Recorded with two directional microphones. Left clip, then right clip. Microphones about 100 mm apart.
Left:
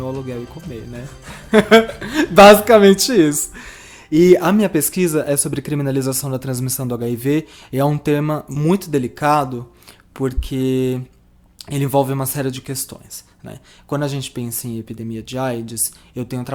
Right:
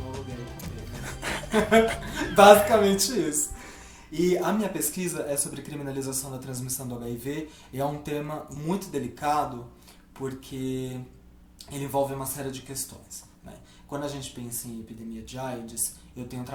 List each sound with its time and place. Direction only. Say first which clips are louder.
2.1 s speech: left 8 dB; 40° left (ahead or behind)
13.9 s speech: left 11 dB; 40° left (ahead or behind)
15.3 s speech: left 12 dB; 40° left (ahead or behind)